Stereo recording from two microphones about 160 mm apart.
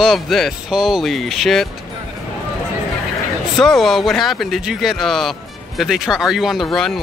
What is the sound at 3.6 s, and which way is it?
Speech, centre (ahead or behind).